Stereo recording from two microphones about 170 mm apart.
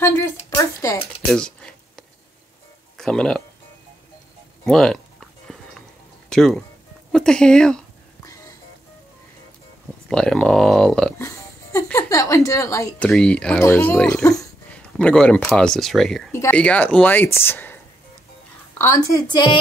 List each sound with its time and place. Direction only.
0.0 s a child's voice: 15° left (ahead or behind)
1.3 s a sound: 5° left (ahead or behind)
3.0 s speech: 5° left (ahead or behind)
4.6 s a sound: 5° left (ahead or behind)
7.1 s speech: 5° left (ahead or behind)
10.0 s speech: 5° left (ahead or behind)
11.1 s a sound: 20° left (ahead or behind)
12.4 s a woman's voice: 20° left (ahead or behind)
13.0 s speech: 5° left (ahead or behind)
13.9 s speech: 5° left (ahead or behind)
16.3 s speech: 15° left (ahead or behind)
18.8 s a woman's voice: 20° left (ahead or behind)